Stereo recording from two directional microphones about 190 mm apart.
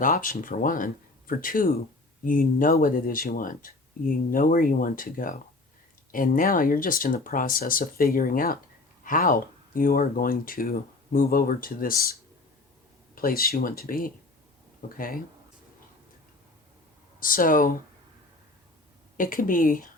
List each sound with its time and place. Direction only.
0.0 s speech: 45° left (ahead or behind)
13.1 s speech: 50° left (ahead or behind)
17.2 s speech: 45° left (ahead or behind)
19.1 s speech: 45° left (ahead or behind)